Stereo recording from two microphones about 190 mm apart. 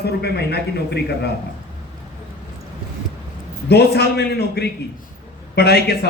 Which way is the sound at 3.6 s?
60° left (ahead or behind).